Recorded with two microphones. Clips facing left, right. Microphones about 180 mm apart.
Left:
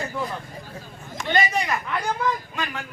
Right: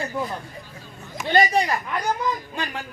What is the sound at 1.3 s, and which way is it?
A man's voice, 35° right (ahead or behind).